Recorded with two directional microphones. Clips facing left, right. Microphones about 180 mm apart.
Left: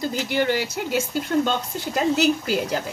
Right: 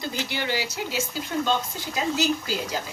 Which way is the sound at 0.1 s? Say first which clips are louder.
Left 5 dB; 50° left (ahead or behind).